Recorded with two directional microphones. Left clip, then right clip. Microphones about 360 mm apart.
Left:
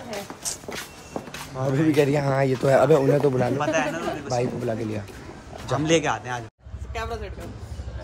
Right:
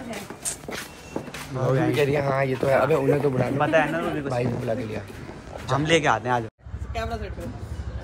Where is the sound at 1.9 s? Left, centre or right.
Left.